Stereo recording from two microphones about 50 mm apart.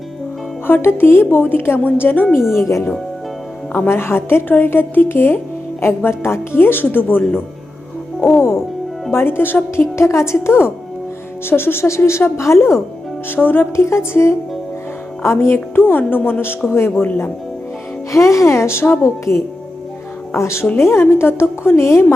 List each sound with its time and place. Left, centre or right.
0.8 s a woman's voice: left
2.5 s speech: left
3.8 s a woman's voice: left
9.1 s a woman's voice: left
9.9 s a woman's voice: left
13.2 s a woman's voice: left
13.7 s a woman's voice: left
15.7 s a woman's voice: left
18.1 s a woman's voice: left